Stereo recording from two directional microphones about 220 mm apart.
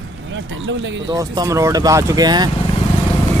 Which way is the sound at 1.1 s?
15° right (ahead or behind).